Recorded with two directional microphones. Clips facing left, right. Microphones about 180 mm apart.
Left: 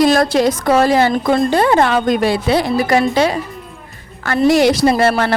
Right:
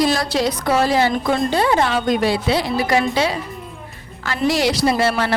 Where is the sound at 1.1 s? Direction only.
40° left (ahead or behind).